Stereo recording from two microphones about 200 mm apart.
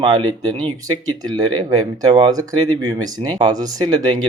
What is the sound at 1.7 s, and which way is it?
Speech, 20° right (ahead or behind).